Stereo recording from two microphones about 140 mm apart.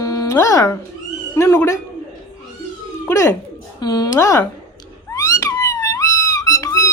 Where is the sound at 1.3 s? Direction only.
25° left (ahead or behind).